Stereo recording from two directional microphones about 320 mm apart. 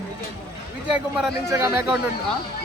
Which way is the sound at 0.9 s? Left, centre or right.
Centre.